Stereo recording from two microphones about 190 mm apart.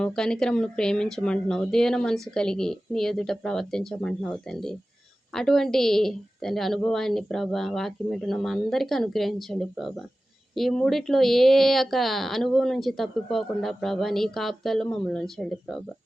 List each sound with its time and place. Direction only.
0.0 s speech: 5° left (ahead or behind)